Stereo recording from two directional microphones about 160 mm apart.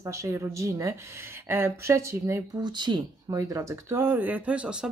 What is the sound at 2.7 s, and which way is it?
Speech, 25° right (ahead or behind).